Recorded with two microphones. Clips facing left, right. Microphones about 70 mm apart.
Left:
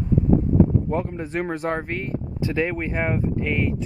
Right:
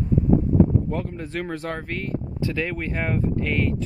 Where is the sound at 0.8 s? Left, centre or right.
Left.